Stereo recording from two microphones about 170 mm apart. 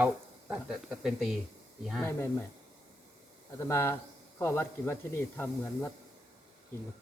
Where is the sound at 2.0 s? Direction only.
15° left (ahead or behind).